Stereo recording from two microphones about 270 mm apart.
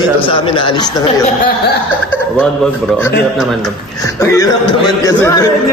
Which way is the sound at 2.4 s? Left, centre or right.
Centre.